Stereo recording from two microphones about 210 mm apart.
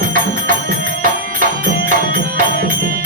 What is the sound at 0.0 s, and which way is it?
Music, 40° right (ahead or behind).